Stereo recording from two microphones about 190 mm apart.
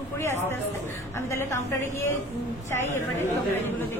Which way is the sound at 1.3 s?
15° left (ahead or behind).